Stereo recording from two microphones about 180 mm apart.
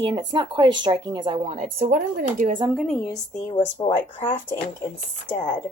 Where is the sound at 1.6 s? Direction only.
45° right (ahead or behind).